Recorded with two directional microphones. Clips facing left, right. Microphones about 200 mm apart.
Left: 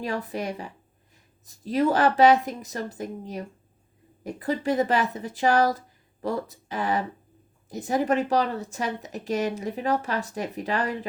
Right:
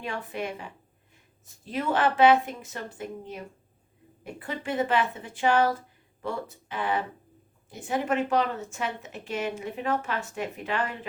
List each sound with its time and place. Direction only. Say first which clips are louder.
0.0 s a woman's voice: left 4 dB; 40° left (ahead or behind)